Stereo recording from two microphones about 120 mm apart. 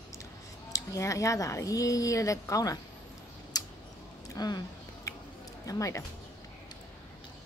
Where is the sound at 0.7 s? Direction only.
25° left (ahead or behind).